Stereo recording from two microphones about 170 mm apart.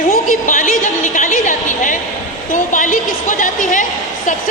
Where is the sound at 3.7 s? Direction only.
50° left (ahead or behind).